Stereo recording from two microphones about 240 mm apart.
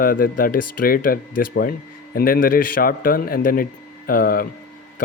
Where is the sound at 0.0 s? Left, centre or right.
Left.